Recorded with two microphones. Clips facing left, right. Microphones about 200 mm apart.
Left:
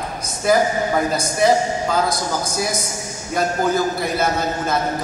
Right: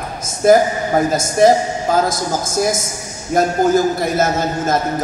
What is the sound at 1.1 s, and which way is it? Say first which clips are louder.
A man's voice: right 6 dB; 45° right (ahead or behind).